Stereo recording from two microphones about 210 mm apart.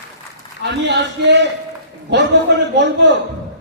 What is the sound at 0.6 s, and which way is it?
Speech, 55° right (ahead or behind).